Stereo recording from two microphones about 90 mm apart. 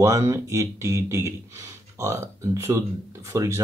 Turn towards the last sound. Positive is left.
turn(degrees=-35)  # may be behind; listen again after turning